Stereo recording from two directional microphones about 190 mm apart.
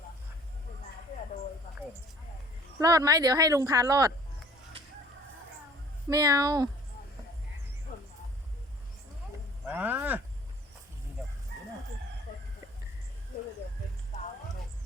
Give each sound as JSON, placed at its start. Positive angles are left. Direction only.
{"t": 2.7, "sound": "speech", "side_deg": -20}
{"t": 6.1, "sound": "speech", "side_deg": -20}
{"t": 7.9, "sound": "music", "side_deg": 45}
{"t": 9.6, "sound": "speech", "side_deg": -10}
{"t": 12.3, "sound": "chicken", "side_deg": 45}